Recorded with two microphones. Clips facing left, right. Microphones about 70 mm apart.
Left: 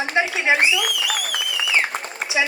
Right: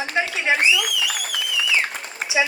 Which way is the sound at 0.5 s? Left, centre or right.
Left.